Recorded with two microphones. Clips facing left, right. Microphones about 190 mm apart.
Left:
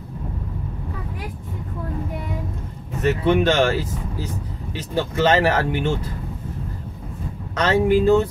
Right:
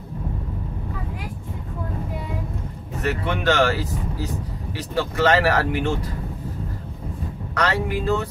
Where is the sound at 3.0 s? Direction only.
20° left (ahead or behind).